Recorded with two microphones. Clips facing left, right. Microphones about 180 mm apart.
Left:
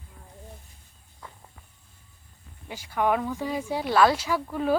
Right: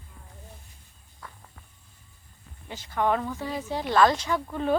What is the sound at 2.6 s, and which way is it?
Speech, 10° left (ahead or behind).